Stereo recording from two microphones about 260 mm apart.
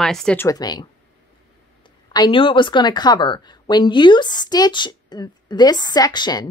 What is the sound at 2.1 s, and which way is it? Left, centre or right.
A woman's voice, centre.